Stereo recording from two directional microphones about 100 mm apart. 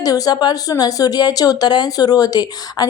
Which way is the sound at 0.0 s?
40° left (ahead or behind).